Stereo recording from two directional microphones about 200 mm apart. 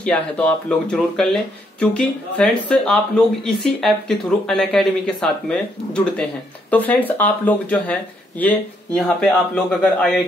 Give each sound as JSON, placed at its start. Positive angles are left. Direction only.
{"t": 0.0, "sound": "speech", "side_deg": 5}
{"t": 6.7, "sound": "speech", "side_deg": 10}